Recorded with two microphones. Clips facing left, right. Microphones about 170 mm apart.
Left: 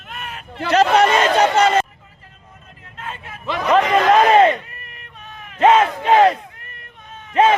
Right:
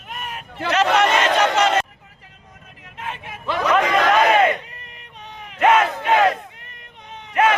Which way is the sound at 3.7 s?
30° left (ahead or behind).